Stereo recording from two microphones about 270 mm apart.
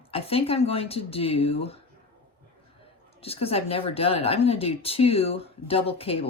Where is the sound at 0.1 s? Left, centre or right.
Left.